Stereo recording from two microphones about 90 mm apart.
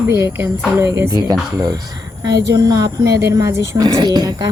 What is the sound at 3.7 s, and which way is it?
Speech, 45° right (ahead or behind).